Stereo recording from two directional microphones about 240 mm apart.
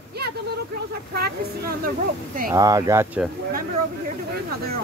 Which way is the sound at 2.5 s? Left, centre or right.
Centre.